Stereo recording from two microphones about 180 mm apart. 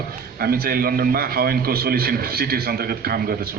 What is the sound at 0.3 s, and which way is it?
A man's voice, 60° right (ahead or behind).